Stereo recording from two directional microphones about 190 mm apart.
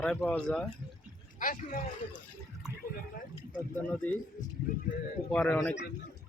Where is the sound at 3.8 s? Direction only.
10° left (ahead or behind).